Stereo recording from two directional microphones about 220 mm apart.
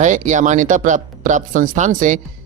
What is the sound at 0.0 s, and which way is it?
Speech, 35° right (ahead or behind).